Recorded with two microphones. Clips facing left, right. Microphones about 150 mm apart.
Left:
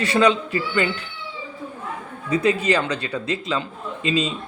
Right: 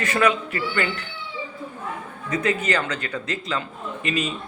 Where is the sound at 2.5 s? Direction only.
15° left (ahead or behind).